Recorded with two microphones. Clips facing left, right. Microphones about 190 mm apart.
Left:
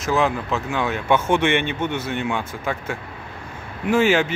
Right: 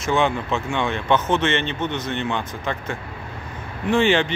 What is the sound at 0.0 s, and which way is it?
Speech, centre (ahead or behind).